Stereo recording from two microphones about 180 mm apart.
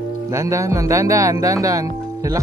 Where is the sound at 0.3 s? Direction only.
15° right (ahead or behind).